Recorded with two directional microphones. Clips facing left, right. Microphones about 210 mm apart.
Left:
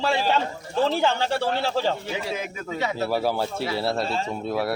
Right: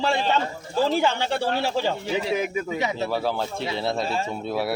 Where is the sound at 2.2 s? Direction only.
10° right (ahead or behind).